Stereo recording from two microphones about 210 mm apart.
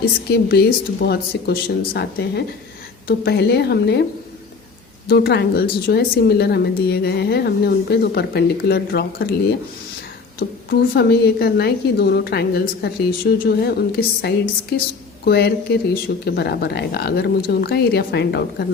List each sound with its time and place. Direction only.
0.3 s a woman's voice: 45° left (ahead or behind)
5.0 s a woman's voice: 50° left (ahead or behind)
10.7 s a woman's voice: 50° left (ahead or behind)